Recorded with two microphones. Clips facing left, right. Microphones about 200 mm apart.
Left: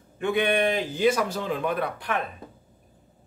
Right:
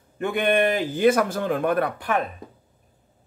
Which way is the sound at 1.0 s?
55° right (ahead or behind).